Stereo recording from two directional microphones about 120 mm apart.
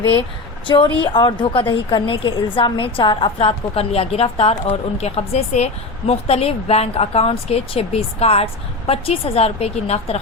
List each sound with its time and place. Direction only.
0.7 s a woman's voice: 45° left (ahead or behind); by 10.2 s 60° left (ahead or behind)